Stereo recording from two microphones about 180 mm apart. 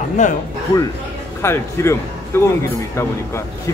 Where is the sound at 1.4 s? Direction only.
15° left (ahead or behind).